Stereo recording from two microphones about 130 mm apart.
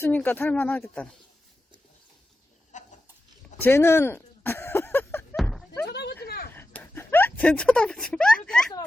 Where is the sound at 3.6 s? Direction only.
15° left (ahead or behind).